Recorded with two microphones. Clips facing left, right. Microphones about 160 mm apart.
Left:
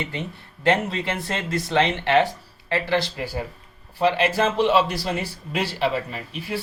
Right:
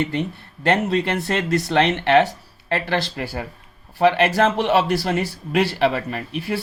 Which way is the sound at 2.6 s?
55° right (ahead or behind).